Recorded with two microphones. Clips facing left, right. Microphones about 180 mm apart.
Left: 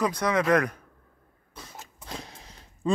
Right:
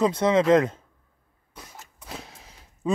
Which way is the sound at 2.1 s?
5° right (ahead or behind).